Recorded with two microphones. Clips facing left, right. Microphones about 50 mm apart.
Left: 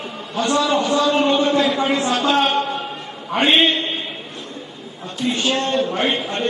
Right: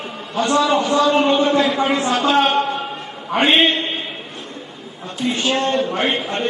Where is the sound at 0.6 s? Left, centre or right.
Centre.